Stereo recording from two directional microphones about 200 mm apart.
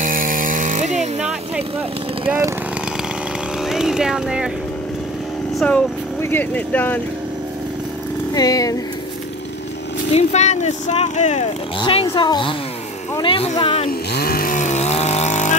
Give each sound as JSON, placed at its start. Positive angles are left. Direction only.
{"t": 0.0, "sound": "chainsaw", "side_deg": -45}
{"t": 2.2, "sound": "speech", "side_deg": -10}
{"t": 3.6, "sound": "speech", "side_deg": 0}
{"t": 5.6, "sound": "speech", "side_deg": 5}
{"t": 8.4, "sound": "speech", "side_deg": 20}
{"t": 10.1, "sound": "speech", "side_deg": 35}
{"t": 11.8, "sound": "speech", "side_deg": 25}
{"t": 13.8, "sound": "chainsaw", "side_deg": 50}